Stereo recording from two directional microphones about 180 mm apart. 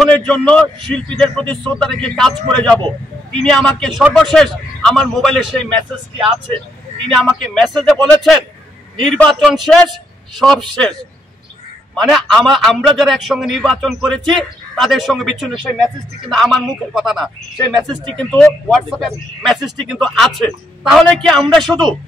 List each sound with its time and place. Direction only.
0.0 s a man's voice: 5° left (ahead or behind)
7.1 s a man's voice: centre (ahead or behind)